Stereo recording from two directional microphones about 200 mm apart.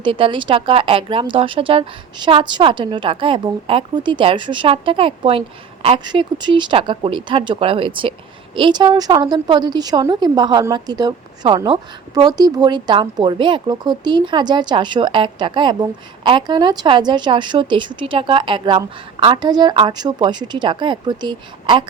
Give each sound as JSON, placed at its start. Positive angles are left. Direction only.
{"t": 0.0, "sound": "a woman's voice", "side_deg": -25}